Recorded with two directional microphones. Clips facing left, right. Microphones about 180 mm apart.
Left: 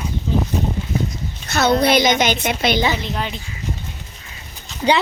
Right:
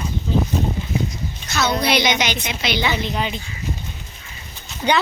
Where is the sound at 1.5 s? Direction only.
55° left (ahead or behind).